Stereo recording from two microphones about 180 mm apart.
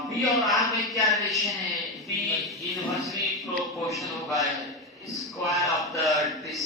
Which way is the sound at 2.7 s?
Centre (ahead or behind).